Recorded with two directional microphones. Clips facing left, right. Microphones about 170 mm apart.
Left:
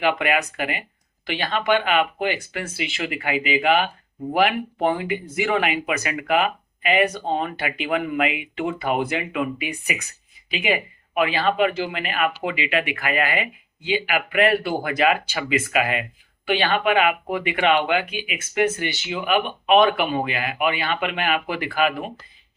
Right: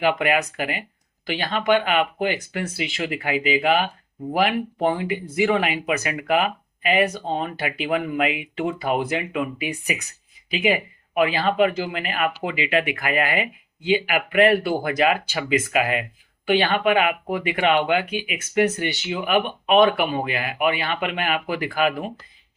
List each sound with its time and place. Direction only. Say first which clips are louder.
0.0 s speech: right 1 dB; 40° right (ahead or behind)